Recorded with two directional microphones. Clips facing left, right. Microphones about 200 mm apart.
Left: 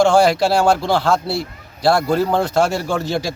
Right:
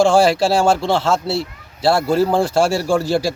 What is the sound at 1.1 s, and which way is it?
Speech, 30° right (ahead or behind).